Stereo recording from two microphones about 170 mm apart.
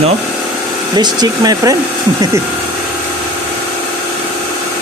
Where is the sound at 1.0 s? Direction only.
25° right (ahead or behind).